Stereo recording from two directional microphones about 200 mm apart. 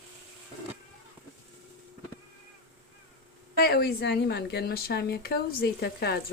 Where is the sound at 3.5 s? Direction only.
55° left (ahead or behind).